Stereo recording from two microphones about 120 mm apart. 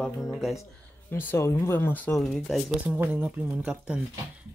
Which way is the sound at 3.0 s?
15° right (ahead or behind).